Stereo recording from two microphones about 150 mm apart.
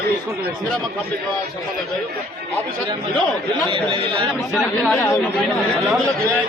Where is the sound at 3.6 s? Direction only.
35° right (ahead or behind).